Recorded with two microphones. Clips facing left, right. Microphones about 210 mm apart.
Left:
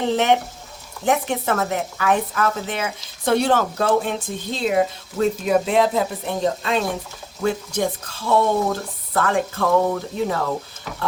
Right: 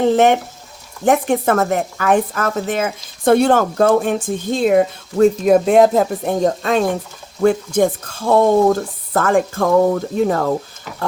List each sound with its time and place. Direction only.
1.0 s speech: 50° right (ahead or behind)